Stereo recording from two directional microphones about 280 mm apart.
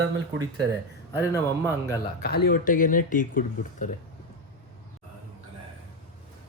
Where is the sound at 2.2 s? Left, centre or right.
Left.